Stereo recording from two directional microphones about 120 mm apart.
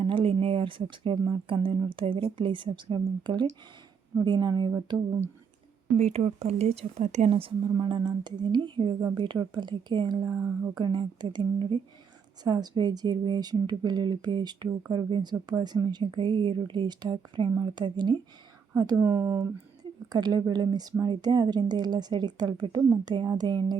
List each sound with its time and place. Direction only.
0.0 s a woman's voice: 50° right (ahead or behind)
6.0 s speech: 60° right (ahead or behind)
7.3 s a woman's voice: 50° right (ahead or behind)
10.3 s speech: 20° right (ahead or behind)
10.8 s a woman's voice: 40° right (ahead or behind)
18.7 s speech: 25° right (ahead or behind)
20.1 s a woman's voice: 35° right (ahead or behind)